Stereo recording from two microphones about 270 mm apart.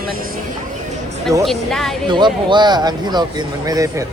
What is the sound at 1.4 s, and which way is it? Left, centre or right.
Speech, centre.